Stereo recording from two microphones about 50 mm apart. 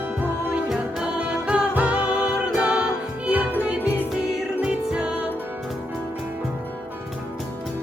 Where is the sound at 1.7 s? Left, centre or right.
Right.